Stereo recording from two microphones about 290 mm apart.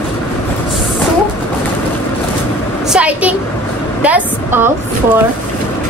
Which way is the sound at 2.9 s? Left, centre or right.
Centre.